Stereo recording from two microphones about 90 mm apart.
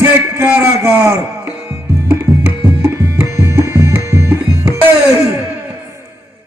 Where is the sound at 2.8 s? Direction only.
30° right (ahead or behind).